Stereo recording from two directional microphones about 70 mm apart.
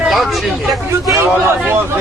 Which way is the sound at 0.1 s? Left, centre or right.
Centre.